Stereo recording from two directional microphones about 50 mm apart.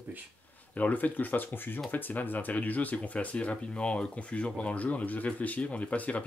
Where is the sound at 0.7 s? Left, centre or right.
Left.